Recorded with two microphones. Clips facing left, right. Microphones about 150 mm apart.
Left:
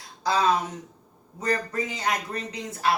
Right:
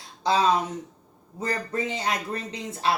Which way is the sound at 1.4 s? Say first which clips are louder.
Left 1 dB; 25° right (ahead or behind).